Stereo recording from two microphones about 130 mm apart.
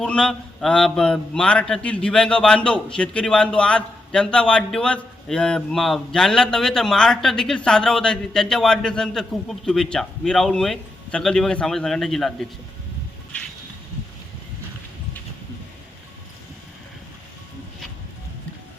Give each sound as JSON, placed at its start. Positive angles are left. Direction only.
{"t": 0.0, "sound": "a man's voice", "side_deg": 5}